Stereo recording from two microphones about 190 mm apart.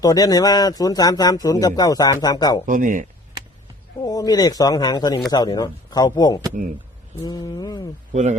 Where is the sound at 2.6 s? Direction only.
45° right (ahead or behind).